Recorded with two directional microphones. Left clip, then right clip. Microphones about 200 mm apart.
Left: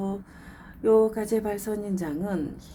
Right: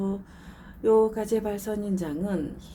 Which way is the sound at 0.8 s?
10° left (ahead or behind).